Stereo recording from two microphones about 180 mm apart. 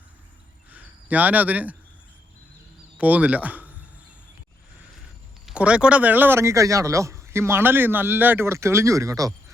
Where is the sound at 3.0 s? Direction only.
10° right (ahead or behind).